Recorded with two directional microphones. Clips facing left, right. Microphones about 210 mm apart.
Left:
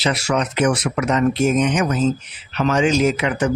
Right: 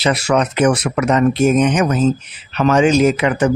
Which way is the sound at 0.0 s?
55° right (ahead or behind).